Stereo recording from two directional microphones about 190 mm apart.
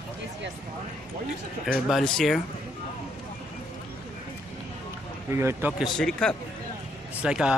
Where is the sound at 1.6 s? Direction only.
Centre (ahead or behind).